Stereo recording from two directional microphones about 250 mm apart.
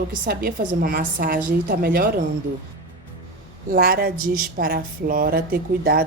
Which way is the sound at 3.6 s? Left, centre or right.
Right.